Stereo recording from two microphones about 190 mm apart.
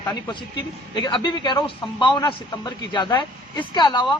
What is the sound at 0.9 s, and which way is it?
A man's voice, 25° left (ahead or behind).